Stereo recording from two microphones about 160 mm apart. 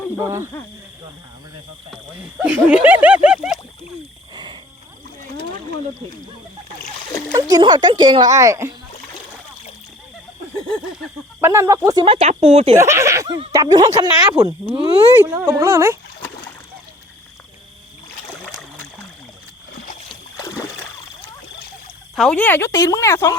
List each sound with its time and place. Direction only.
0.2 s speech: 15° right (ahead or behind)
2.4 s speech: 10° right (ahead or behind)
7.3 s a child's voice: 20° right (ahead or behind)
11.3 s speech: 15° right (ahead or behind)
12.0 s speech: 40° right (ahead or behind)
12.7 s a child's voice: 20° right (ahead or behind)
20.3 s splash: 20° left (ahead or behind)
22.1 s speech: centre (ahead or behind)
22.4 s speech: 15° left (ahead or behind)